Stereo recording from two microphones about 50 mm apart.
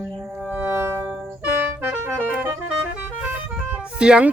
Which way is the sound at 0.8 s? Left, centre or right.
Right.